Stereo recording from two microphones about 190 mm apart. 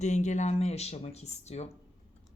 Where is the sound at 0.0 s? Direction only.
40° left (ahead or behind).